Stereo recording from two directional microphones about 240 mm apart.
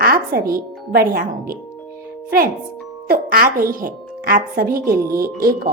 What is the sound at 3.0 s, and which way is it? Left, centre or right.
A woman's voice, right.